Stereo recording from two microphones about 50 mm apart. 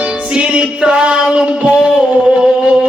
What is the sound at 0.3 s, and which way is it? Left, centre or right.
Music, right.